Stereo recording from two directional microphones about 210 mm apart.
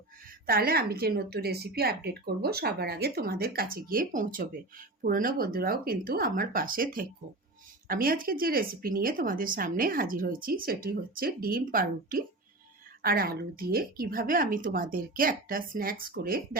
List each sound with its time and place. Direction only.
0.4 s speech: 45° right (ahead or behind)